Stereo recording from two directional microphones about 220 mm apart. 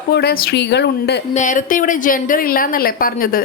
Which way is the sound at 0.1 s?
45° left (ahead or behind).